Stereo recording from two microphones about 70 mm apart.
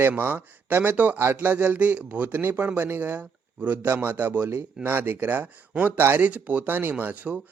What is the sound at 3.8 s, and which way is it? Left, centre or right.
Speech, right.